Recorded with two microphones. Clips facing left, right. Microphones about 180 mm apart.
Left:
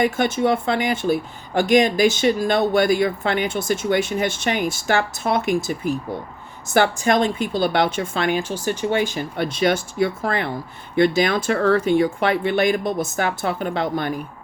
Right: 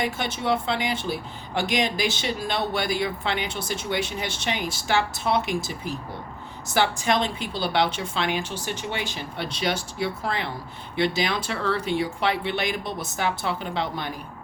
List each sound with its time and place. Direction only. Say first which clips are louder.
0.0 s speech: left 8 dB; 50° left (ahead or behind)